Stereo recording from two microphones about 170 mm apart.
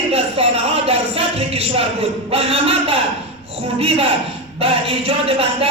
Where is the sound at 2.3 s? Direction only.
35° right (ahead or behind).